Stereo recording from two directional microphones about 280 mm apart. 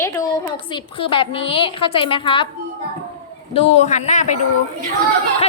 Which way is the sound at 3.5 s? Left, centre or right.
Left.